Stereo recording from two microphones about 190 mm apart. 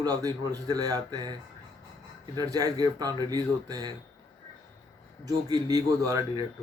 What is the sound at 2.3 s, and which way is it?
A man's voice, 20° right (ahead or behind).